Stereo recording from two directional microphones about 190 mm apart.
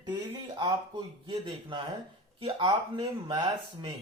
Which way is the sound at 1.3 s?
25° right (ahead or behind).